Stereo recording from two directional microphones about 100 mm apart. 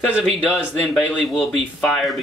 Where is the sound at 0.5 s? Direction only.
Centre (ahead or behind).